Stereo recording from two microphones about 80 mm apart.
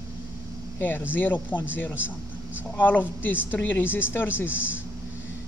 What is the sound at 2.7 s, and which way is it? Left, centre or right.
Speech, left.